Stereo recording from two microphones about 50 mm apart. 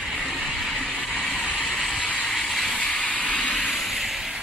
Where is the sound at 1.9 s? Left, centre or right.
Left.